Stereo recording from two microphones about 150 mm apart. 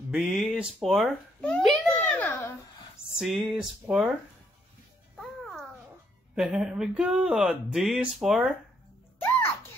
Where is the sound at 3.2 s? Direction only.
5° right (ahead or behind).